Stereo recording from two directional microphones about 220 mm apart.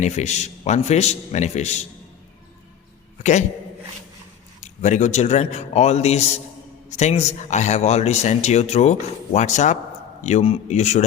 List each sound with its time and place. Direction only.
0.0 s speech: 30° left (ahead or behind)
4.6 s a man's voice: 35° left (ahead or behind)